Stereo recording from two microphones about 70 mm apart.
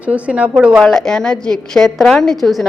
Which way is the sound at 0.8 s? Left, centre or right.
Centre.